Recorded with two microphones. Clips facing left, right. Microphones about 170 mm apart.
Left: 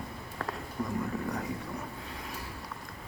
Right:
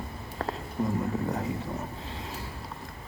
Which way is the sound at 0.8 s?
25° right (ahead or behind).